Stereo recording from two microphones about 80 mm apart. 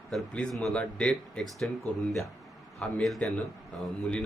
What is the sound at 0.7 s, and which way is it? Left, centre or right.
Speech, centre.